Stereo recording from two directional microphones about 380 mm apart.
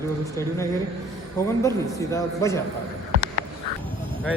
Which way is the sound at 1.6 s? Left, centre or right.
Centre.